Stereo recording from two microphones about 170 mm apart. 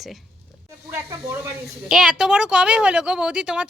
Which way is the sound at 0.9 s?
15° right (ahead or behind).